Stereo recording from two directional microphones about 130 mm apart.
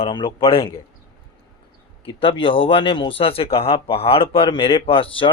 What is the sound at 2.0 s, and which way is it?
A man's voice, 40° left (ahead or behind).